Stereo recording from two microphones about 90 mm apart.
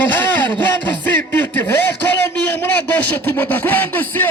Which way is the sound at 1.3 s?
20° left (ahead or behind).